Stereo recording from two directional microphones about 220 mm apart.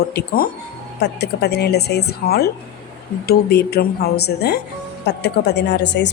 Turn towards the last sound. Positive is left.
turn(degrees=50)  # may be behind; listen again after turning